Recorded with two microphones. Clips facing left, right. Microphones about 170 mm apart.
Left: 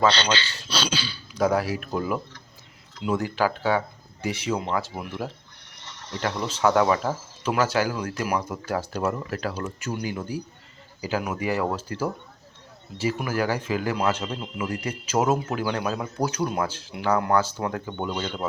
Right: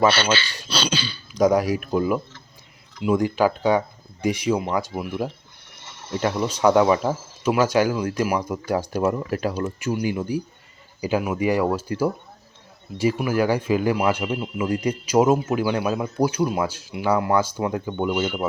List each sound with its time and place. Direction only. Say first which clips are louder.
0.8 s speech: right 3 dB; 5° left (ahead or behind)
1.4 s speech: right 5 dB; 15° right (ahead or behind)